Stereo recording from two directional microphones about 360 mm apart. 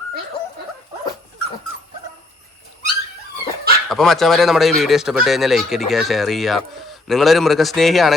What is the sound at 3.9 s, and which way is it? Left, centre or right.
A man's voice, centre.